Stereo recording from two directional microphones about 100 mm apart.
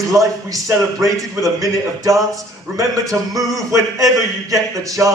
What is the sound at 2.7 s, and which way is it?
A man's voice, 35° right (ahead or behind).